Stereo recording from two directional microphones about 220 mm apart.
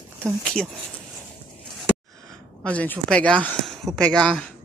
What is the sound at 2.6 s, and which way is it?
Speech, 5° left (ahead or behind).